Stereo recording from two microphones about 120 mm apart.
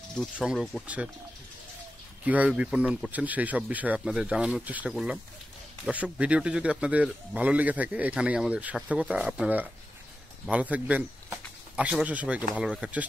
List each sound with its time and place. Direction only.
0.4 s speech: 5° right (ahead or behind)
2.2 s speech: 10° right (ahead or behind)